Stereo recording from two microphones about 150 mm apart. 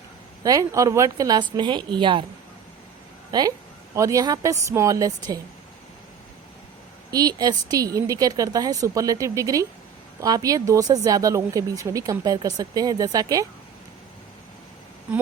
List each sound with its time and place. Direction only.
0.4 s speech: 20° right (ahead or behind)
3.9 s speech: 20° right (ahead or behind)
7.1 s speech: 25° right (ahead or behind)